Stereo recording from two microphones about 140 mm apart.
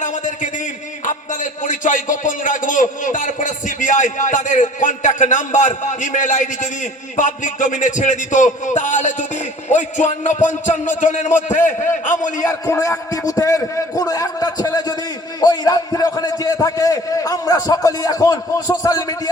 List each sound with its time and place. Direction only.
0.0 s a sound: 65° left (ahead or behind)
1.0 s a man's voice: 65° left (ahead or behind)
12.4 s a man's voice: 25° left (ahead or behind)